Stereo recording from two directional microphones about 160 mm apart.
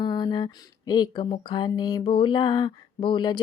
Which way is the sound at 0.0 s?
25° left (ahead or behind).